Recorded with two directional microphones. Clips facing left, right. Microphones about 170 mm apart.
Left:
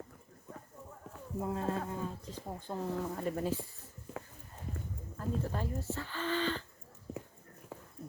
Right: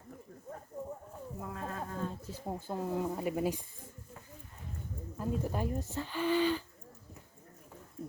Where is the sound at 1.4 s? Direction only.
25° left (ahead or behind).